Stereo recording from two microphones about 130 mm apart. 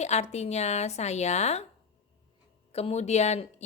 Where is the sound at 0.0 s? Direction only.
60° left (ahead or behind).